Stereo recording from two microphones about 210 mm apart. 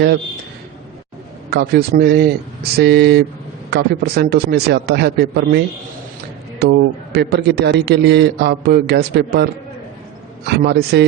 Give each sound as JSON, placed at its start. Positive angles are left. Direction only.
{"t": 1.5, "sound": "a man's voice", "side_deg": -50}